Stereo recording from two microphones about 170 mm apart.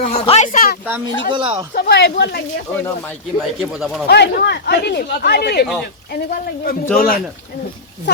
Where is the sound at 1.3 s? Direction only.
30° right (ahead or behind).